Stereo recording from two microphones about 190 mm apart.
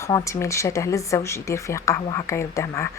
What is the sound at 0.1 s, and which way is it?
A woman's voice, 15° left (ahead or behind).